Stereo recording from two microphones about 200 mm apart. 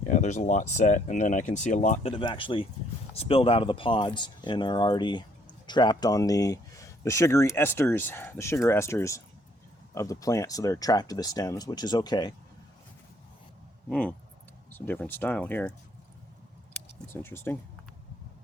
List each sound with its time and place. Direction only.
0.0 s speech: 35° left (ahead or behind); by 12.3 s 20° left (ahead or behind)
13.9 s speech: 5° left (ahead or behind)
17.1 s speech: 10° left (ahead or behind)